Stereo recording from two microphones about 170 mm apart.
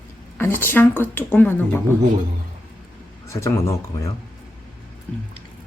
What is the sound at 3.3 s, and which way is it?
Speech, 15° left (ahead or behind).